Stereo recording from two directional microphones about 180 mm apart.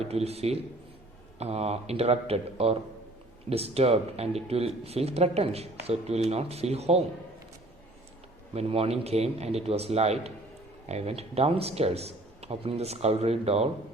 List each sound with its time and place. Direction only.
0.0 s a man's voice: 35° right (ahead or behind)
8.5 s a man's voice: 35° right (ahead or behind)